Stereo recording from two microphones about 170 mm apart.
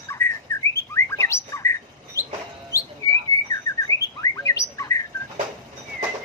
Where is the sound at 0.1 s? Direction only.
15° left (ahead or behind).